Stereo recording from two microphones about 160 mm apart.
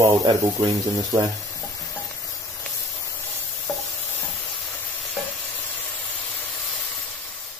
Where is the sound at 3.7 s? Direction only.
5° left (ahead or behind).